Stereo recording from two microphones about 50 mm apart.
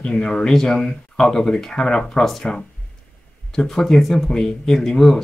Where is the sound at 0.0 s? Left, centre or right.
Centre.